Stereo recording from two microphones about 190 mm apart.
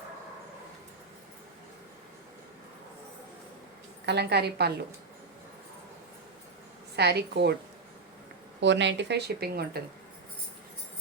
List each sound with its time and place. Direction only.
4.0 s speech: 60° right (ahead or behind)
6.9 s speech: 60° right (ahead or behind)
8.6 s speech: 70° right (ahead or behind)